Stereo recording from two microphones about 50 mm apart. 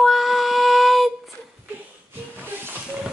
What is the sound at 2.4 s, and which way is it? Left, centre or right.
Music, right.